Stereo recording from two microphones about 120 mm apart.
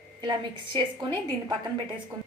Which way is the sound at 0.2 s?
40° right (ahead or behind).